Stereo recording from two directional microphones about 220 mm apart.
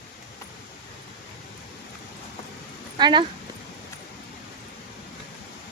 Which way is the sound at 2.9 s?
20° right (ahead or behind).